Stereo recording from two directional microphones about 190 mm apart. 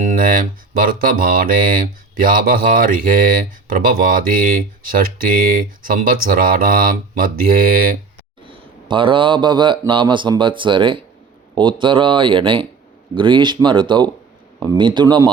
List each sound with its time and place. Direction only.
0.0 s mantra: 45° right (ahead or behind)
8.4 s a man's voice: 25° right (ahead or behind)